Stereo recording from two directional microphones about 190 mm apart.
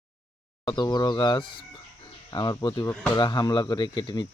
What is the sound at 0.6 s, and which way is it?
Speech, 25° left (ahead or behind).